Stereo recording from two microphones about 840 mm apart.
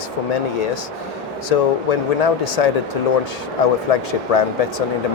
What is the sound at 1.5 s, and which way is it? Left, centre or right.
Speech, left.